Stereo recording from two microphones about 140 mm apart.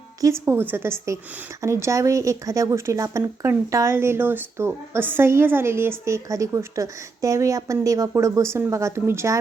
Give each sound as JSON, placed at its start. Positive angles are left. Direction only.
{"t": 0.4, "sound": "a woman's voice", "side_deg": -15}